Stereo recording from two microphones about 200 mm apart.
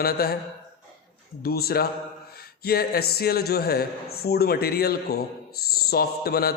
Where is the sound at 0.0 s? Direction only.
50° left (ahead or behind).